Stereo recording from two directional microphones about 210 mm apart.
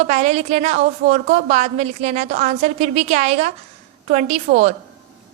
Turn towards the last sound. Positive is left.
turn(degrees=-35)  # may be behind; listen again after turning